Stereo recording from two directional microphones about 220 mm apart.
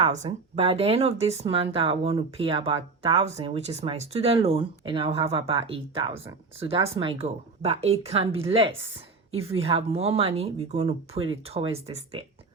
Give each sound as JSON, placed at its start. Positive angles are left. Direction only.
{"t": 0.1, "sound": "speech", "side_deg": -30}